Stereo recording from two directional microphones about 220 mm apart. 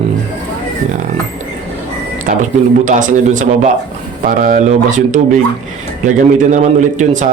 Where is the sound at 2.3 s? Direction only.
40° right (ahead or behind).